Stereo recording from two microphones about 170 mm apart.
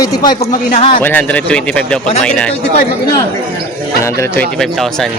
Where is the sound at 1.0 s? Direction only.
10° left (ahead or behind).